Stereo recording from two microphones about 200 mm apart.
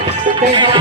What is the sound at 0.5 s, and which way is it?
Music, 25° right (ahead or behind).